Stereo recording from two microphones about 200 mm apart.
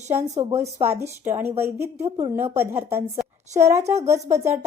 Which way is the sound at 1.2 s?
10° right (ahead or behind).